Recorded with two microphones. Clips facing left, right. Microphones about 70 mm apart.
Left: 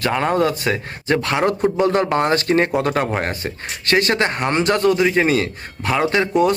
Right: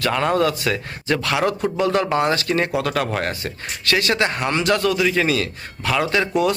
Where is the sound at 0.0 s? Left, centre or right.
Left.